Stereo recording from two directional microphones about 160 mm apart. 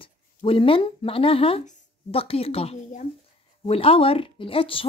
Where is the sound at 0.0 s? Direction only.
35° left (ahead or behind).